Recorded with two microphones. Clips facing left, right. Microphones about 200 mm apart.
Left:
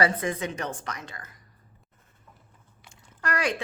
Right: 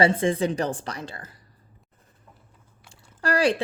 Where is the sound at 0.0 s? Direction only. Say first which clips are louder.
Right 5 dB; 30° right (ahead or behind).